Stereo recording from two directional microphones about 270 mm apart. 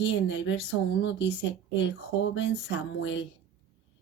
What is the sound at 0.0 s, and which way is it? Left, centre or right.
Speech, left.